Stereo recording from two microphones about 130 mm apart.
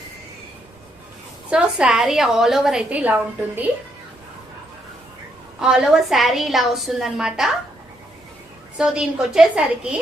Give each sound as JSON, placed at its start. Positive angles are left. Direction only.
{"t": 1.5, "sound": "a woman's voice", "side_deg": -5}
{"t": 5.5, "sound": "a woman's voice", "side_deg": -5}
{"t": 8.8, "sound": "a woman's voice", "side_deg": -5}